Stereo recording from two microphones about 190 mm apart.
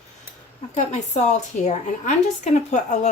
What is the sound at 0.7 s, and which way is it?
A woman's voice, 35° left (ahead or behind).